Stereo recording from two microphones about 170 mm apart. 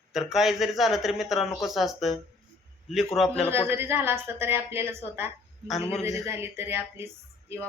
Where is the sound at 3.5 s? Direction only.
15° right (ahead or behind).